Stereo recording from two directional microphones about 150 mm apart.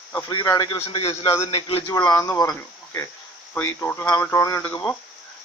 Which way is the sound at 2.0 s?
25° left (ahead or behind).